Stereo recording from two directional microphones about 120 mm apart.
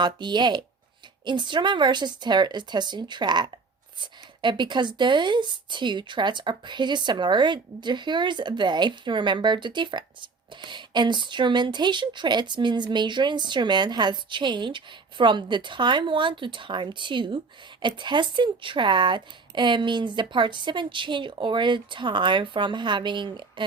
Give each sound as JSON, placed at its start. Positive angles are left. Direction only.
{"t": 0.0, "sound": "speech", "side_deg": -40}